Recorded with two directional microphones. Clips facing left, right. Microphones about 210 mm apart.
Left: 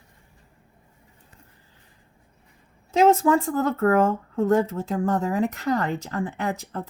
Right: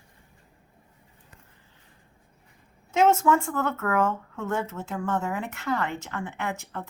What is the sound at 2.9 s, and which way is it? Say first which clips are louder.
Speech: left 3 dB; 35° left (ahead or behind).